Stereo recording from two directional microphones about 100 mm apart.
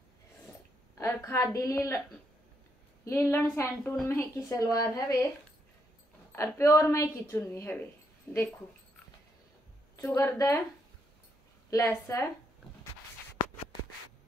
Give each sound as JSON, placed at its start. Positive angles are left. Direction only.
{"t": 0.9, "sound": "a woman's voice", "side_deg": 30}
{"t": 3.1, "sound": "a woman's voice", "side_deg": 25}
{"t": 6.3, "sound": "a woman's voice", "side_deg": 25}
{"t": 9.9, "sound": "a woman's voice", "side_deg": 25}
{"t": 11.7, "sound": "a woman's voice", "side_deg": 35}